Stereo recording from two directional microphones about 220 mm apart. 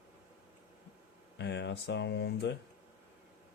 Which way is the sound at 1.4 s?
50° left (ahead or behind).